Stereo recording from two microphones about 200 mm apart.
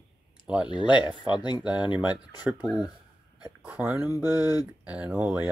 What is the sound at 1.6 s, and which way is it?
Speech, 5° right (ahead or behind).